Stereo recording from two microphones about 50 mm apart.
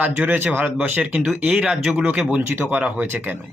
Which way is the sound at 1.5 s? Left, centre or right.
Centre.